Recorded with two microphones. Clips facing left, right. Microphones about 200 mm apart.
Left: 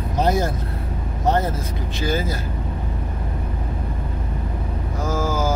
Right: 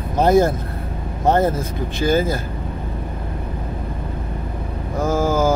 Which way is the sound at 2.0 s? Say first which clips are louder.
Right 6 dB; 50° right (ahead or behind).